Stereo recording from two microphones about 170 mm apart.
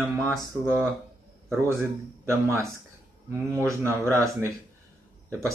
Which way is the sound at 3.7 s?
15° right (ahead or behind).